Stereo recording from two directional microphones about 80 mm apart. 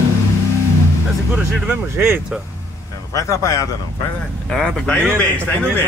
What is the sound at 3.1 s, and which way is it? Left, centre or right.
Speech, left.